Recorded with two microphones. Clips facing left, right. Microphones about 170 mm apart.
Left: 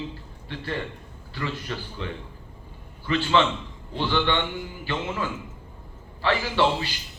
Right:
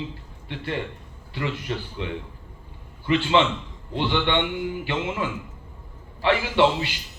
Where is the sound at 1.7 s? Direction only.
20° right (ahead or behind).